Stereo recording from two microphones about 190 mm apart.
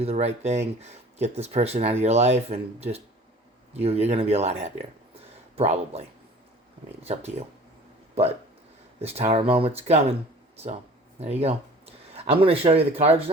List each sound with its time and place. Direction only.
0.0 s speech: 35° right (ahead or behind)
7.0 s speech: 35° right (ahead or behind)
9.0 s speech: 35° right (ahead or behind)
11.2 s speech: 35° right (ahead or behind)